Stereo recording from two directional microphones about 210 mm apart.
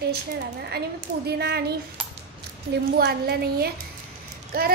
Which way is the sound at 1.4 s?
50° right (ahead or behind).